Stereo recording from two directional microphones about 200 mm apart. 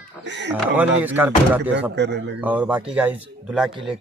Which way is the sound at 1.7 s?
60° right (ahead or behind).